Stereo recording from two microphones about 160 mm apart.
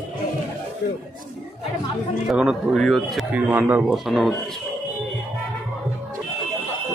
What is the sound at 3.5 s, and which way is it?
Speech, 10° right (ahead or behind).